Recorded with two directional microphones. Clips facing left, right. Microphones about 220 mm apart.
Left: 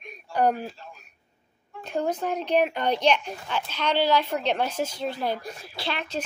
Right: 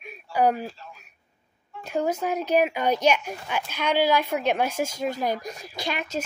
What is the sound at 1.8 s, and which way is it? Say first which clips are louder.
A child's voice: right 1 dB; 10° right (ahead or behind).